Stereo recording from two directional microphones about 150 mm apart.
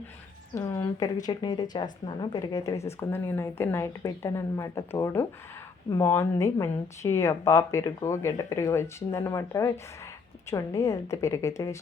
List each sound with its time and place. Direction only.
0.5 s a woman's voice: 20° left (ahead or behind)